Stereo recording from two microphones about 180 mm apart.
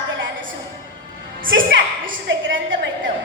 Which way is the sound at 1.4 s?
90° right.